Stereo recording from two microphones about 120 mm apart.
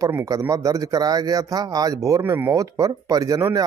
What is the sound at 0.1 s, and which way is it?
A man's voice, 25° right (ahead or behind).